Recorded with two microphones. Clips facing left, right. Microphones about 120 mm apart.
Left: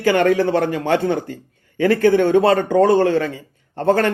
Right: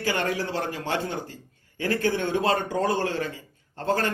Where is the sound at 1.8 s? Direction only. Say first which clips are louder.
Left 11 dB; 75° left (ahead or behind).